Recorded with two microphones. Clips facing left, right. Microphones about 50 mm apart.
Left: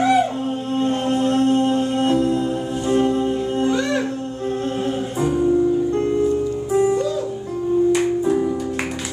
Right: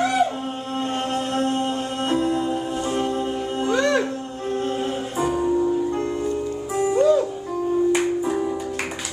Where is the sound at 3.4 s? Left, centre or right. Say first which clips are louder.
Left 1 dB; right.